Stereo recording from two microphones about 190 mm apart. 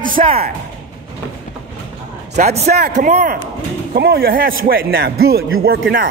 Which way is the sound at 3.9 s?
55° right (ahead or behind).